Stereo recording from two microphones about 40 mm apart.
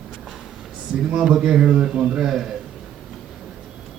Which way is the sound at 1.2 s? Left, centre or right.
Centre.